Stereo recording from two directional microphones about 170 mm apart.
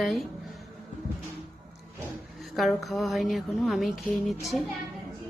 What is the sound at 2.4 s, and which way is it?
A woman's voice, centre (ahead or behind).